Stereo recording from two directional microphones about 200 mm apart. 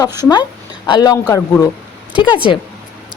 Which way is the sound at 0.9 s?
20° left (ahead or behind).